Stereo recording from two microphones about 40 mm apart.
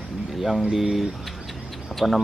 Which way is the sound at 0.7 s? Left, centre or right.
Centre.